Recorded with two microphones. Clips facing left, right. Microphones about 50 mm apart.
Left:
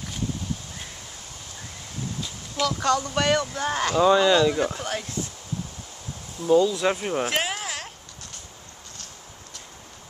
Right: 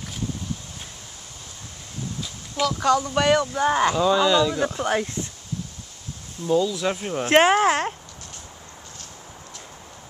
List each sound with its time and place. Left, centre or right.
2.6 s speech: centre
4.0 s speech: centre
4.7 s speech: right
6.4 s speech: right
6.7 s speech: centre
7.2 s speech: right